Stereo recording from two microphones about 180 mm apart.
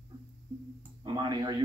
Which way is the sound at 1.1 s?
25° right (ahead or behind).